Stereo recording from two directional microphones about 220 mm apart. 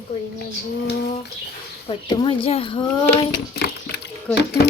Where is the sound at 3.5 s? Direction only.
45° left (ahead or behind).